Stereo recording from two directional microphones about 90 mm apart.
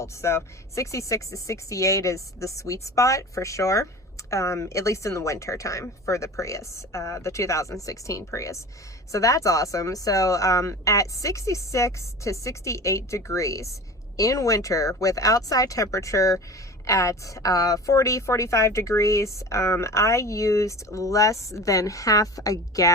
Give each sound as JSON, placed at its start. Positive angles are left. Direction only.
{"t": 0.0, "sound": "a woman's voice", "side_deg": 30}